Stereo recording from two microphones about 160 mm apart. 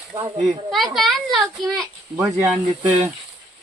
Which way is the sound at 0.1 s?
25° right (ahead or behind).